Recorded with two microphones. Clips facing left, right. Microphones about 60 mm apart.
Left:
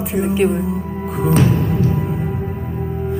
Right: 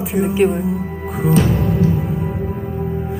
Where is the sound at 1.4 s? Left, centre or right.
Right.